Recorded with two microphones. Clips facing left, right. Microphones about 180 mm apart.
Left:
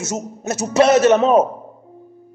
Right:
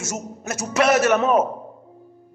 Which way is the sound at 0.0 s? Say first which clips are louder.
Left 5 dB; 25° left (ahead or behind).